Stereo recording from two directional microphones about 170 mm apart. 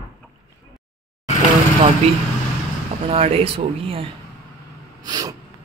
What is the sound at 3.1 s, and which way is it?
Speech, 35° right (ahead or behind).